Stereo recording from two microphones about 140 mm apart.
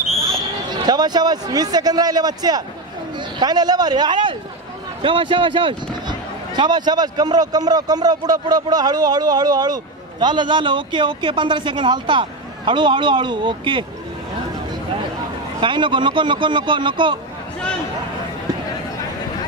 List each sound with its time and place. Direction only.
0.0 s basketball bounce: centre (ahead or behind)
0.7 s a man's voice: 30° right (ahead or behind)
15.6 s speech: 35° right (ahead or behind)